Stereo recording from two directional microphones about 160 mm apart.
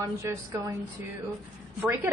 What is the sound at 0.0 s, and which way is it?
Speech, 15° right (ahead or behind).